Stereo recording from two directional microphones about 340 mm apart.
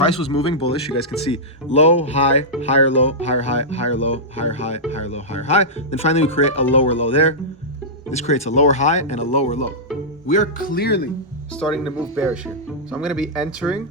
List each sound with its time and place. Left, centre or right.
0.3 s speech: centre
11.5 s speech: centre